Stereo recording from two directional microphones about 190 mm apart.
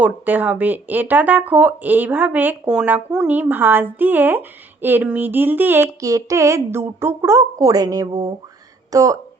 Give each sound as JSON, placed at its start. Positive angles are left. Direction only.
{"t": 0.0, "sound": "speech", "side_deg": -10}